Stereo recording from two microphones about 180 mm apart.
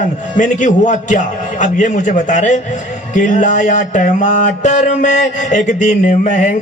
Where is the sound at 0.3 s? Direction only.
45° left (ahead or behind).